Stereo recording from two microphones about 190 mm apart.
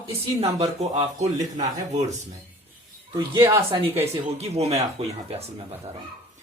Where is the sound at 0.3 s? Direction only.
35° right (ahead or behind).